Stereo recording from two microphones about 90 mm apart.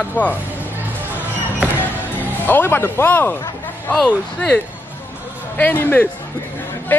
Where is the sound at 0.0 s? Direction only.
15° left (ahead or behind).